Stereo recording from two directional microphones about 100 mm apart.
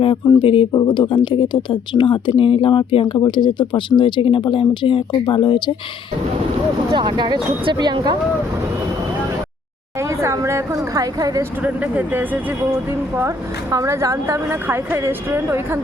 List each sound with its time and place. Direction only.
0.3 s speech: 60° left (ahead or behind)
3.2 s speech: 50° left (ahead or behind)
6.9 s speech: 50° right (ahead or behind)
10.0 s a woman's voice: 30° right (ahead or behind)
11.6 s speech: 15° right (ahead or behind)
13.1 s a woman's voice: 35° right (ahead or behind)